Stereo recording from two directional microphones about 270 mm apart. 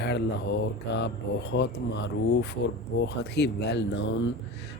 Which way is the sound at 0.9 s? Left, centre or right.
Left.